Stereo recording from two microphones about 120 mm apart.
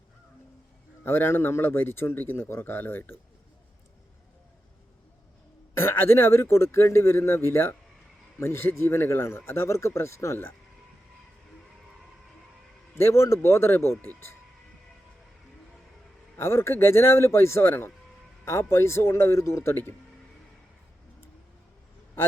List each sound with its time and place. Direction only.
1.0 s a man's voice: 20° left (ahead or behind)
5.7 s a man's voice: 20° left (ahead or behind)
12.9 s a man's voice: 20° left (ahead or behind)
16.4 s a man's voice: 20° left (ahead or behind)